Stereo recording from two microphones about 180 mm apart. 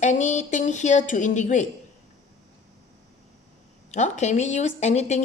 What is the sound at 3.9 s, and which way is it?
A woman's voice, 40° left (ahead or behind).